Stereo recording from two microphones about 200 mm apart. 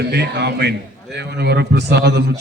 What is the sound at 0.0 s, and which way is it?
A man's voice, 55° right (ahead or behind).